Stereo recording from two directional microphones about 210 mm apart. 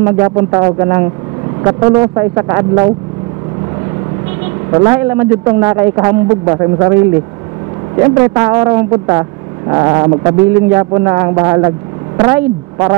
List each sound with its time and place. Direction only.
0.0 s a man's voice: 20° right (ahead or behind)
4.7 s a man's voice: 15° right (ahead or behind)
8.0 s a man's voice: 20° right (ahead or behind)